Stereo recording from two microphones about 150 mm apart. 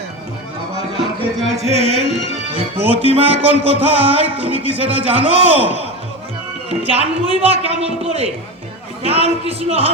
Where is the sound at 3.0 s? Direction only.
40° right (ahead or behind).